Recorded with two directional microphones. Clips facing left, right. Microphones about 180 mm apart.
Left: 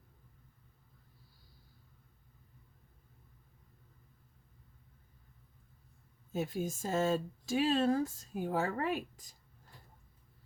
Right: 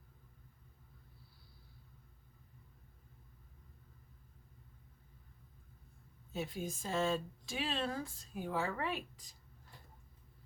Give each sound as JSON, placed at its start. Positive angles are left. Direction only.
{"t": 6.3, "sound": "speech", "side_deg": 45}